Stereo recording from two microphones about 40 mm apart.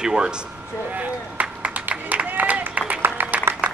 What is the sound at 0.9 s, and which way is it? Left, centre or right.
Run, right.